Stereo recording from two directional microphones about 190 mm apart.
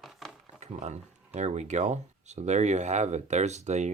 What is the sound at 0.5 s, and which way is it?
Speech, 35° right (ahead or behind).